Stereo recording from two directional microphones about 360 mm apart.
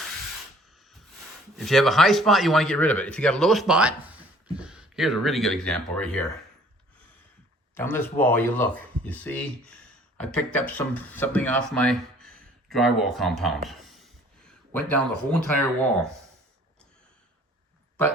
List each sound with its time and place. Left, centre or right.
1.5 s speech: centre
7.8 s speech: centre